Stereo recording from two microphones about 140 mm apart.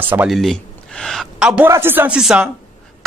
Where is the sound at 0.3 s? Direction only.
Centre (ahead or behind).